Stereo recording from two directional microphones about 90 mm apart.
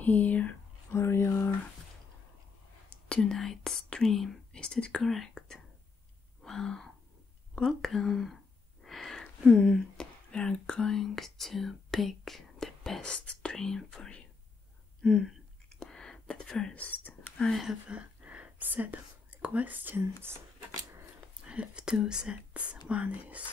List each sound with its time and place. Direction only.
0.0 s speech: 20° left (ahead or behind)
0.9 s a sound: 30° left (ahead or behind)
2.9 s speech: 10° left (ahead or behind)
6.4 s gasp: 5° left (ahead or behind)
7.5 s speech: 5° left (ahead or behind)
8.8 s a sound: centre (ahead or behind)
9.5 s speech: 5° left (ahead or behind)
15.7 s whispering: 5° left (ahead or behind)
17.5 s speech: centre (ahead or behind)
17.8 s speech: 15° right (ahead or behind)
21.5 s speech: 10° right (ahead or behind)